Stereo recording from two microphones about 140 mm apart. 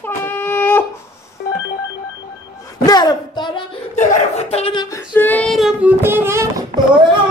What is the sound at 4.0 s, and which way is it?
Chuckle, 55° left (ahead or behind).